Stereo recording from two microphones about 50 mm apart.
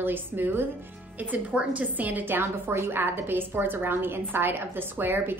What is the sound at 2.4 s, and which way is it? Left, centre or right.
A woman's voice, right.